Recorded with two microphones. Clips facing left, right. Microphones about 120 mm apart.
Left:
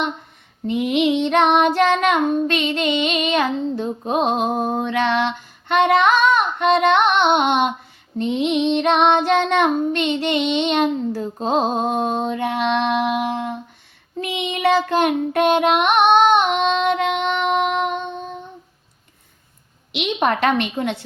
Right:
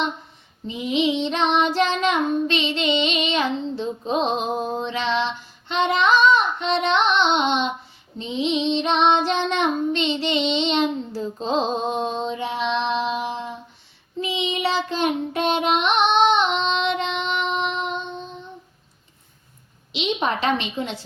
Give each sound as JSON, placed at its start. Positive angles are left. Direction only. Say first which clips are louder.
{"t": 0.7, "sound": "child singing", "louder": "left 4 dB", "side_deg": 60}
{"t": 19.9, "sound": "a woman's voice", "louder": "left 3 dB", "side_deg": 60}